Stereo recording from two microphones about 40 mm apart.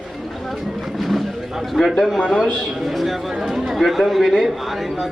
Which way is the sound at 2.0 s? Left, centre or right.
Centre.